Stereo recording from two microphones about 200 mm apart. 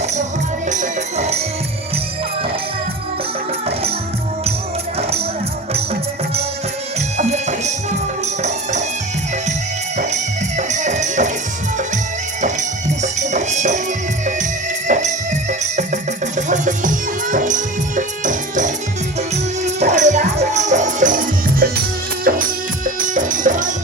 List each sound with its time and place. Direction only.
0.7 s music: 35° right (ahead or behind)
5.7 s music: 30° right (ahead or behind)
10.6 s music: 35° right (ahead or behind)
12.4 s music: 35° right (ahead or behind)
14.8 s music: 35° right (ahead or behind)